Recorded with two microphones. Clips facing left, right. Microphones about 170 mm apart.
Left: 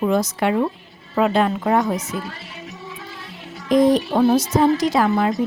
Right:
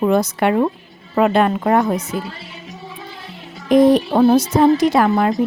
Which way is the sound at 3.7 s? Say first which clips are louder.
Right 3 dB; 60° right (ahead or behind).